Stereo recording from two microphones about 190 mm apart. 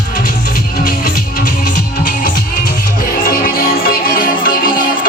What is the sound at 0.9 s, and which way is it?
Music, 50° left (ahead or behind).